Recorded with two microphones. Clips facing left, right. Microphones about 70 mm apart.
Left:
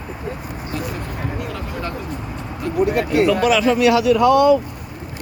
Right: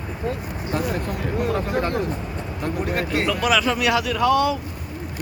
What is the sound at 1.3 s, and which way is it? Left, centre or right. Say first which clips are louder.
Speech: right 5 dB; right.